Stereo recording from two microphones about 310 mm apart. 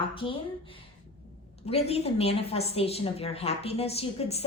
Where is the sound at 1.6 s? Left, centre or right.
Centre.